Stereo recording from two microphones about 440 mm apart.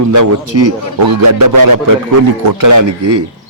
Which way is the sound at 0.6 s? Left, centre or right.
Right.